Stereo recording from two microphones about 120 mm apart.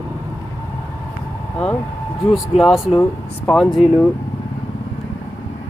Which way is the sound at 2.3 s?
Centre (ahead or behind).